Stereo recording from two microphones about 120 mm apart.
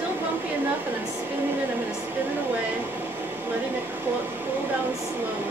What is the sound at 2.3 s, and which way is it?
Speech, 15° right (ahead or behind).